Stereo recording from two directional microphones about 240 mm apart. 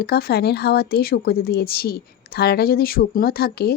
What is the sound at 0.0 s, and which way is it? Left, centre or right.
Speech, left.